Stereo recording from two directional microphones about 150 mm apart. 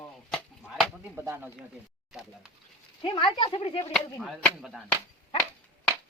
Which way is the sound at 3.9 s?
5° left (ahead or behind).